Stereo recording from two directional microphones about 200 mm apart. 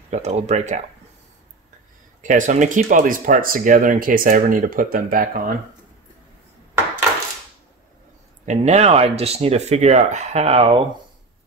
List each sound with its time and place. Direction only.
0.1 s speech: 35° right (ahead or behind)
2.2 s speech: 40° right (ahead or behind)
8.5 s speech: 35° right (ahead or behind)